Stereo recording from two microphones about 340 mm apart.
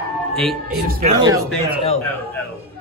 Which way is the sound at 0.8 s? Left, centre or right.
Right.